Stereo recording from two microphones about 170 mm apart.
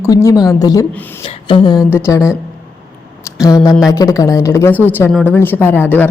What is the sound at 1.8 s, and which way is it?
Speech, 15° left (ahead or behind).